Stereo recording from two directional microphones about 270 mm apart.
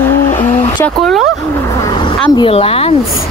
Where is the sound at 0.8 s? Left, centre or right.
Centre.